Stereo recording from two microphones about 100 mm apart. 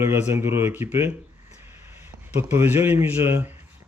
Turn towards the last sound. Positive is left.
turn(degrees=-25)  # may be behind; listen again after turning